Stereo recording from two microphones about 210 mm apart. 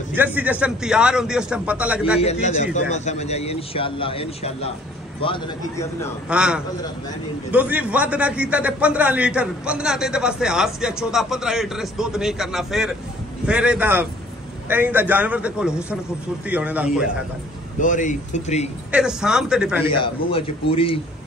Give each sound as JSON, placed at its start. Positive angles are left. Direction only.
{"t": 0.1, "sound": "a man's voice", "side_deg": -10}
{"t": 2.4, "sound": "a man's voice", "side_deg": 35}
{"t": 6.2, "sound": "a man's voice", "side_deg": -5}
{"t": 17.7, "sound": "a man's voice", "side_deg": 40}
{"t": 18.9, "sound": "a man's voice", "side_deg": -5}
{"t": 19.9, "sound": "a man's voice", "side_deg": 25}